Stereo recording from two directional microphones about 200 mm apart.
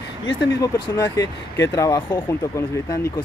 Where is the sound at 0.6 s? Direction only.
20° left (ahead or behind).